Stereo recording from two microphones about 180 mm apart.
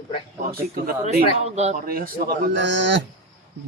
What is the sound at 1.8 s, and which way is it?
Speech, 55° right (ahead or behind).